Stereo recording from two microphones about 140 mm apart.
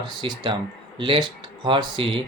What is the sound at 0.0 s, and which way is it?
Speech, 35° right (ahead or behind).